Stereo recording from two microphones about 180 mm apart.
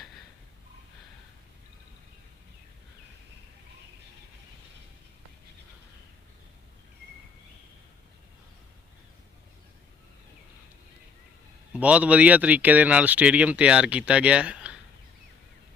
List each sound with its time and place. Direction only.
11.7 s speech: 5° right (ahead or behind)